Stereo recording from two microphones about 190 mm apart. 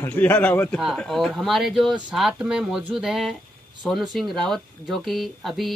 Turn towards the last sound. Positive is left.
turn(degrees=0)  # may be behind; listen again after turning